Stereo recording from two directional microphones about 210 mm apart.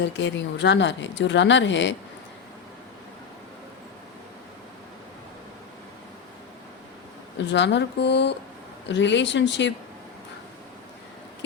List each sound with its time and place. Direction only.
0.2 s speech: 60° left (ahead or behind)
7.3 s speech: 55° left (ahead or behind)